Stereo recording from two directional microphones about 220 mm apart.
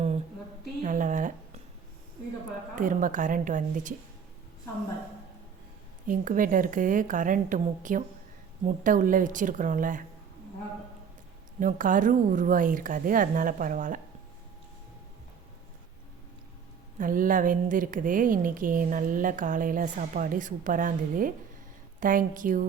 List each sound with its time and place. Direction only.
0.8 s a sound: 35° right (ahead or behind)
2.7 s a woman's voice: 35° right (ahead or behind)
6.1 s a woman's voice: 35° right (ahead or behind)
11.6 s a woman's voice: 35° right (ahead or behind)
17.0 s a woman's voice: 40° right (ahead or behind)